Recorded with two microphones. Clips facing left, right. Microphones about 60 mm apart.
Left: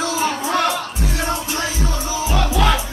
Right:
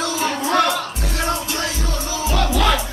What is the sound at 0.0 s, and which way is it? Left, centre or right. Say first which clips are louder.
Music: left 1 dB; centre.